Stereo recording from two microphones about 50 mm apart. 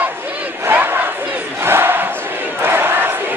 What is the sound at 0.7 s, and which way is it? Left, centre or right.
Battle cry, right.